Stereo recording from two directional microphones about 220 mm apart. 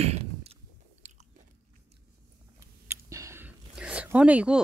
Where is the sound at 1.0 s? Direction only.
35° right (ahead or behind).